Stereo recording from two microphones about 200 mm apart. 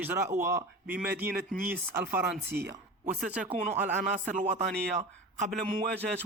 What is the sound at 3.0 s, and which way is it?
Speech, 5° right (ahead or behind).